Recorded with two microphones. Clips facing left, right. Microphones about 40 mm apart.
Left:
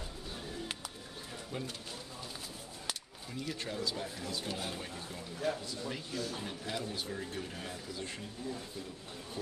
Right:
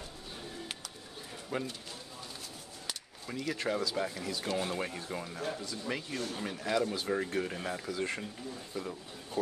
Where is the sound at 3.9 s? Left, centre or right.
Right.